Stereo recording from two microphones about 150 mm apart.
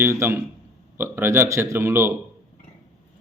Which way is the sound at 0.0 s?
15° right (ahead or behind).